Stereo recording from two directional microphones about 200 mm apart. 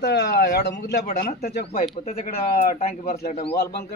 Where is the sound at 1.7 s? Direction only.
35° left (ahead or behind).